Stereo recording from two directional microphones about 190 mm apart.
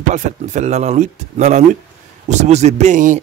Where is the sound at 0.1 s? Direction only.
40° right (ahead or behind).